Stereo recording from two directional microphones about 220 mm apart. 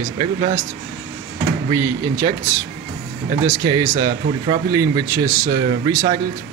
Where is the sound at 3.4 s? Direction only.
20° right (ahead or behind).